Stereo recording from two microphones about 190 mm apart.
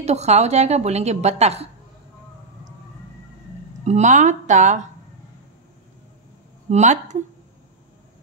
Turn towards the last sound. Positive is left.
turn(degrees=-40)  # may be behind; listen again after turning